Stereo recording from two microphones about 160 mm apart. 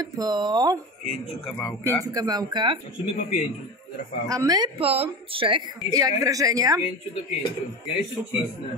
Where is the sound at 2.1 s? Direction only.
25° right (ahead or behind).